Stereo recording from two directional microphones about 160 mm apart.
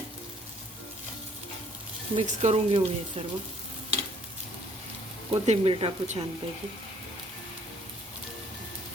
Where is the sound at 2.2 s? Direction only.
35° right (ahead or behind).